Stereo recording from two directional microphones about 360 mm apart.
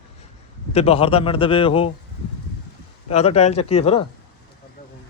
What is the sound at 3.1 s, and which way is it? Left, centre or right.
Speech, centre.